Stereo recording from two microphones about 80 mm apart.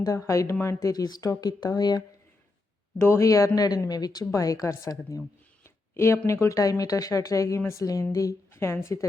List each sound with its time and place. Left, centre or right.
0.0 s a woman's voice: left
3.0 s speech: left
6.2 s a woman's voice: left